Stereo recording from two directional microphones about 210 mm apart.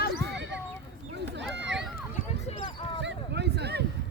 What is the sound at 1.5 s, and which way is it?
Run, 60° right (ahead or behind).